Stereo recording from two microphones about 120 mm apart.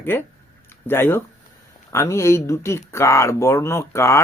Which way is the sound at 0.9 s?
20° left (ahead or behind).